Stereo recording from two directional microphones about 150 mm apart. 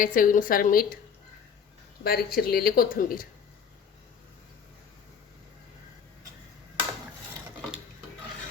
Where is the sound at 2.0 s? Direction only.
90° left; by 3.2 s 70° left (ahead or behind).